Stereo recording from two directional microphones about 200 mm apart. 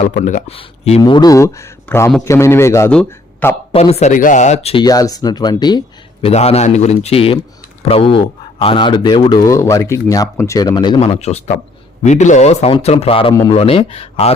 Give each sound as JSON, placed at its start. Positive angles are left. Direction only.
{"t": 0.0, "sound": "a man's voice", "side_deg": 40}
{"t": 0.5, "sound": "speech", "side_deg": 30}
{"t": 3.7, "sound": "a man's voice", "side_deg": 30}
{"t": 11.1, "sound": "a man's voice", "side_deg": 35}